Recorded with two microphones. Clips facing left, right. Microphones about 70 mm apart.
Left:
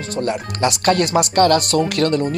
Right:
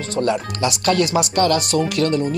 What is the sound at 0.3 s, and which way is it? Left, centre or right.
Speech, left.